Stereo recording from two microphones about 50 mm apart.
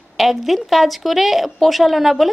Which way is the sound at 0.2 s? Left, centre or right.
Centre.